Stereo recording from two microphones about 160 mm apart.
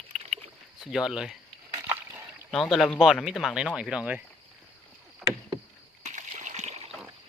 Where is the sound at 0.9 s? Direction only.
5° right (ahead or behind).